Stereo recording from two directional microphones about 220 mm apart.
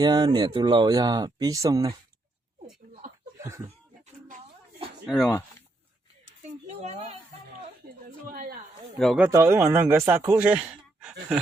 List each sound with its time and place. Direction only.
0.0 s speech: 20° right (ahead or behind)
3.3 s chuckle: 15° right (ahead or behind)
5.0 s speech: centre (ahead or behind)
6.7 s a sound: 30° right (ahead or behind)
8.0 s a sound: 40° right (ahead or behind)
9.0 s speech: 5° right (ahead or behind)